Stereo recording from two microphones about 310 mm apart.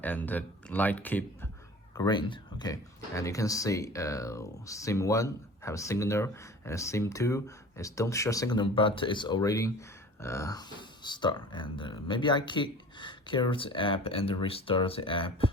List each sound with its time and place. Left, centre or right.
0.0 s speech: centre